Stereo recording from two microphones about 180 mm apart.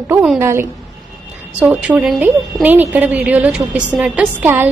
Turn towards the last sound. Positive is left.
turn(degrees=-10)  # may be behind; listen again after turning